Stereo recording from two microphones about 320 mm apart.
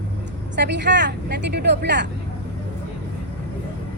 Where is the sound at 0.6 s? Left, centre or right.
Right.